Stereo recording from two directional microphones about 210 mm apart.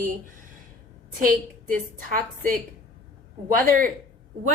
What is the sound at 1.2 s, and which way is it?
A woman's voice, 40° right (ahead or behind).